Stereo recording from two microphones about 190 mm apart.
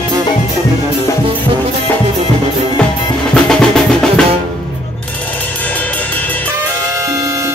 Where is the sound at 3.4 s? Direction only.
5° left (ahead or behind).